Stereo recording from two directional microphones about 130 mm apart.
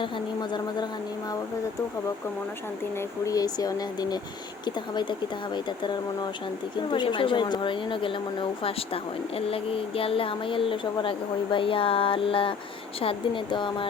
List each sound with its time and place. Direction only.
2.9 s speech: 20° left (ahead or behind); by 11.1 s 40° left (ahead or behind)
11.5 s a sound: 45° left (ahead or behind)
13.0 s speech: 45° left (ahead or behind)